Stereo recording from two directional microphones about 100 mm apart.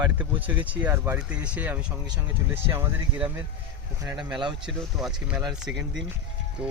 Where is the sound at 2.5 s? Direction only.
25° right (ahead or behind).